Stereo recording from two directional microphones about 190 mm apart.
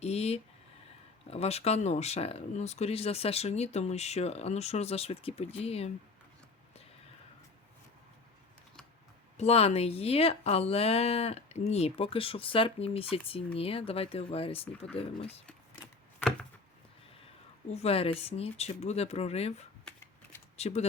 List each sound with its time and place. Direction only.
0.0 s speech: 35° left (ahead or behind)
9.4 s speech: 30° left (ahead or behind)
17.7 s speech: 35° left (ahead or behind)